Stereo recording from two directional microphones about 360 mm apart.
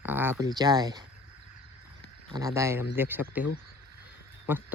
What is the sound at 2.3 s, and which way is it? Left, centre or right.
A man's voice, centre.